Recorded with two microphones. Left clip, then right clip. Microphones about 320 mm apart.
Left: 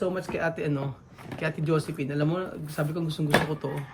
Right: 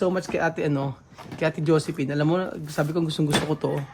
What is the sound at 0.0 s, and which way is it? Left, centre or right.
Speech, centre.